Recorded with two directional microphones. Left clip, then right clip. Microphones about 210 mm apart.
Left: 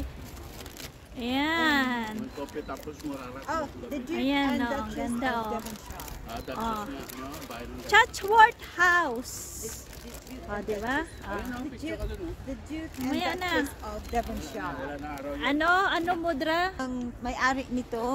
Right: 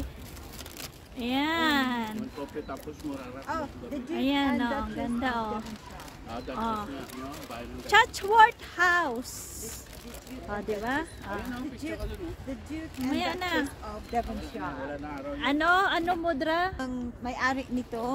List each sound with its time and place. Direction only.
1.2 s a sound: 5° right (ahead or behind)
2.4 s speech: 10° left (ahead or behind)
3.5 s speech: 30° left (ahead or behind)
4.1 s a woman's voice: 5° right (ahead or behind)
7.8 s a woman's voice: 5° right (ahead or behind)
14.1 s speech: 50° left (ahead or behind)
15.4 s a woman's voice: 10° right (ahead or behind); by 18.1 s 20° left (ahead or behind)